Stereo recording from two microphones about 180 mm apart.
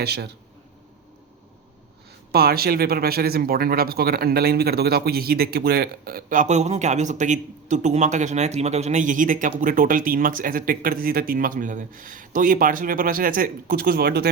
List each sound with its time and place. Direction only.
0.0 s speech: 65° right (ahead or behind)
2.3 s speech: 60° right (ahead or behind)